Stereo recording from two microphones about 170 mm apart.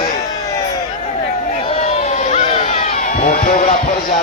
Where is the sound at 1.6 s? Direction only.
35° left (ahead or behind); by 3.6 s 55° left (ahead or behind).